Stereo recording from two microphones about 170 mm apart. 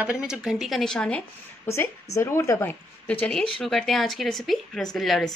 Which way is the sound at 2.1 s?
15° left (ahead or behind).